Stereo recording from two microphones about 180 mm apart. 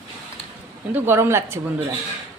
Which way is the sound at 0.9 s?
15° right (ahead or behind).